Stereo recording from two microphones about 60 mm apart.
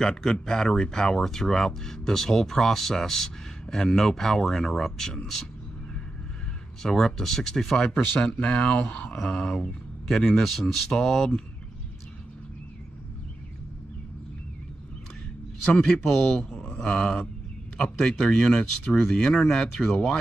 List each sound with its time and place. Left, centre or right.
0.0 s speech: centre
6.8 s a man's voice: centre
15.7 s speech: centre